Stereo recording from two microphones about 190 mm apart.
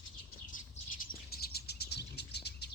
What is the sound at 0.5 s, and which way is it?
Bird, 45° left (ahead or behind).